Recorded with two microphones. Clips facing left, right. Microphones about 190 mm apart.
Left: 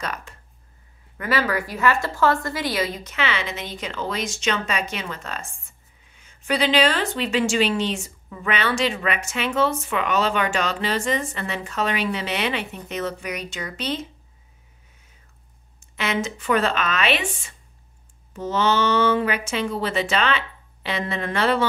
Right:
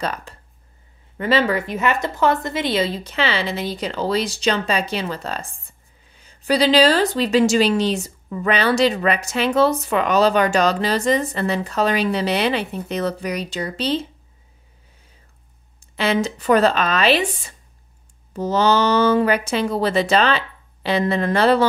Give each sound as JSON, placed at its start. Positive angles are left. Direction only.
{"t": 0.0, "sound": "a woman's voice", "side_deg": -35}
{"t": 16.0, "sound": "a woman's voice", "side_deg": -35}